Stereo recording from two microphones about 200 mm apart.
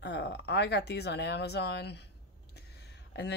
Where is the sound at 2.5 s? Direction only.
55° left (ahead or behind).